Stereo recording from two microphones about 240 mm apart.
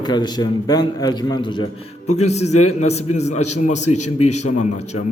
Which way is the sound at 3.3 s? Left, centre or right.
Left.